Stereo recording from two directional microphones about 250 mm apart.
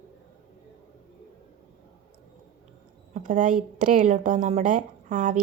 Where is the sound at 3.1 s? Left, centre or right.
Right.